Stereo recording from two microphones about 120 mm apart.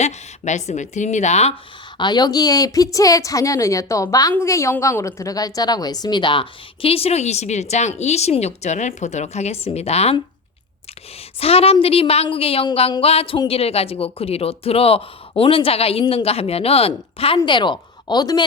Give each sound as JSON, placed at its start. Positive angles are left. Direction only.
{"t": 0.0, "sound": "a woman's voice", "side_deg": 75}
{"t": 2.0, "sound": "a woman's voice", "side_deg": 35}
{"t": 11.3, "sound": "speech", "side_deg": 55}